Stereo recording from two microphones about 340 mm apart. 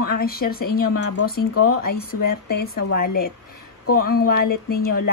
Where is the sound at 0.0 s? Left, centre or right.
Left.